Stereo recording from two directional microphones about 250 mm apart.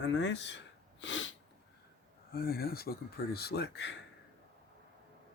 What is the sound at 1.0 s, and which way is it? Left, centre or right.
Sneeze, left.